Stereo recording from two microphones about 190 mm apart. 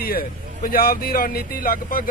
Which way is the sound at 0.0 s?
50° left (ahead or behind).